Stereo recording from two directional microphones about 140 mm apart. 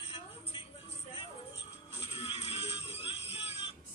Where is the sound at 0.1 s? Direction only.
40° left (ahead or behind).